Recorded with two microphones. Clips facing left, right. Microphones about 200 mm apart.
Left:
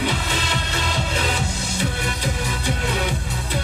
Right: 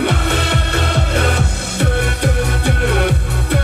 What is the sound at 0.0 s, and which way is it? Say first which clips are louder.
Music: right 7 dB; 60° right (ahead or behind).